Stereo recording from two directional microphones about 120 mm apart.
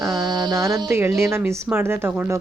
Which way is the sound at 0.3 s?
35° right (ahead or behind).